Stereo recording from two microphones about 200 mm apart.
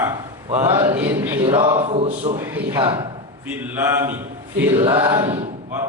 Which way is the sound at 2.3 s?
10° right (ahead or behind).